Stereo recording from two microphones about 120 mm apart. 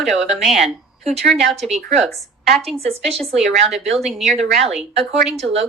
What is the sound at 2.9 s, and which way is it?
Speech, 60° right (ahead or behind).